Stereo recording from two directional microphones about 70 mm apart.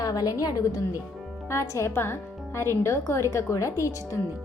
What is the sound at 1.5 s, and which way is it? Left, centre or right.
Speech, left.